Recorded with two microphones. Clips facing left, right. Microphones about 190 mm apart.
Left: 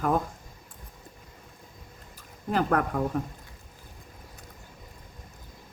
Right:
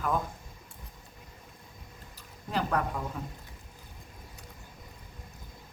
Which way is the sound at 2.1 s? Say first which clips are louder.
Left 6 dB; 50° left (ahead or behind).